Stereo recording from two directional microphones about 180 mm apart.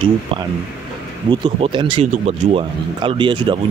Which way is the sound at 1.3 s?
25° right (ahead or behind).